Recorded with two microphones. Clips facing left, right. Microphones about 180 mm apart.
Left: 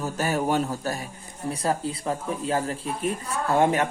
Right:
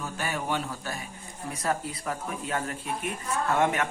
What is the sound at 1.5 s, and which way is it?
Speech, 30° left (ahead or behind).